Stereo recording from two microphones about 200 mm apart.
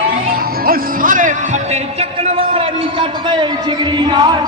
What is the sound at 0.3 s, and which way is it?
Music, 45° right (ahead or behind).